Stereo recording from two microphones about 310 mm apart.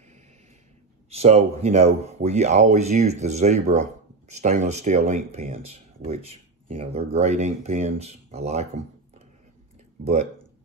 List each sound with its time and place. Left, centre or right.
1.1 s speech: centre